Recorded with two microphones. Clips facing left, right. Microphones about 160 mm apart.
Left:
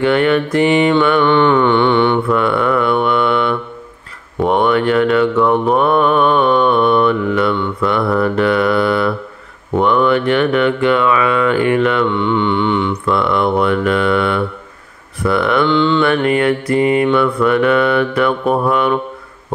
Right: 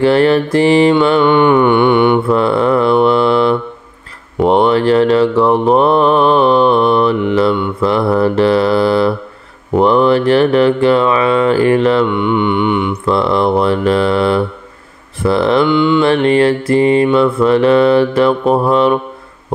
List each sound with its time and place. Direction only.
0.0 s mantra: 35° right (ahead or behind)
1.2 s mantra: 15° right (ahead or behind)
2.2 s mantra: 30° right (ahead or behind)
9.8 s a sound: 35° right (ahead or behind)
12.1 s mantra: 15° right (ahead or behind)
13.0 s a sound: 30° right (ahead or behind)
15.2 s mantra: 30° right (ahead or behind)
15.6 s mantra: 10° right (ahead or behind)
16.0 s mantra: 30° right (ahead or behind)